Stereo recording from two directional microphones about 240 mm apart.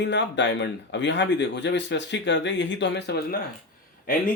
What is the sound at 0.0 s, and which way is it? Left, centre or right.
Speech, left.